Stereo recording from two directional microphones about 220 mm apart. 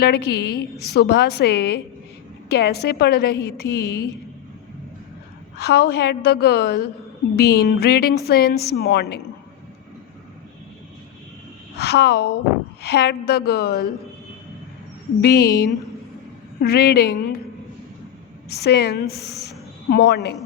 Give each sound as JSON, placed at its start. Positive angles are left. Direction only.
{"t": 0.0, "sound": "a woman's voice", "side_deg": 50}
{"t": 5.5, "sound": "a woman's voice", "side_deg": 45}
{"t": 11.8, "sound": "a woman's voice", "side_deg": 50}
{"t": 15.2, "sound": "a woman's voice", "side_deg": 45}
{"t": 18.4, "sound": "a woman's voice", "side_deg": 50}